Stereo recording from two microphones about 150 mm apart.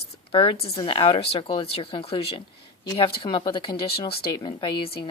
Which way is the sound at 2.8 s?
30° left (ahead or behind).